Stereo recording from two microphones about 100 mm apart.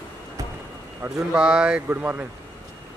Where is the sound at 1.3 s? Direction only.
10° right (ahead or behind).